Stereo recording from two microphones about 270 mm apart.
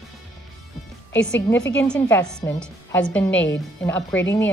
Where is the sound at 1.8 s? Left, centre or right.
Centre.